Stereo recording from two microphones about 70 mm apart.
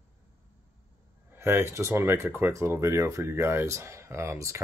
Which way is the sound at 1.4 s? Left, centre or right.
Right.